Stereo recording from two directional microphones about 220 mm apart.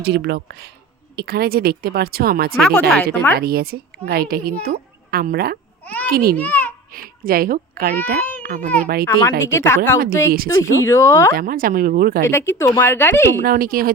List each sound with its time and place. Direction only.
0.0 s speech: 50° right (ahead or behind)
2.6 s speech: centre (ahead or behind)
3.3 s a woman's voice: 45° right (ahead or behind)
5.8 s a sound: 5° left (ahead or behind)
6.1 s speech: 40° right (ahead or behind)
6.3 s a child's voice: 5° left (ahead or behind)
6.9 s speech: 40° right (ahead or behind)
9.5 s speech: 10° left (ahead or behind)
11.3 s speech: 40° right (ahead or behind)
12.2 s speech: 10° left (ahead or behind)
13.4 s speech: 40° right (ahead or behind)